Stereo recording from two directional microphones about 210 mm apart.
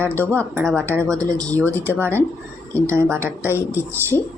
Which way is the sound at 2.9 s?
10° right (ahead or behind).